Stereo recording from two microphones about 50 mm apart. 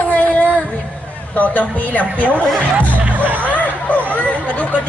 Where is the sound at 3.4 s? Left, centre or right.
Left.